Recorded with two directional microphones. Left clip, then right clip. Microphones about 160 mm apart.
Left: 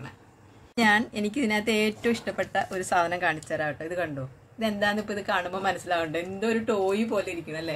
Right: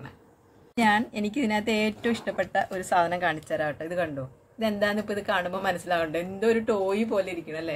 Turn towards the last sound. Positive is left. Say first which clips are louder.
# right 1 dB
turn(degrees=-10)  # may be behind; listen again after turning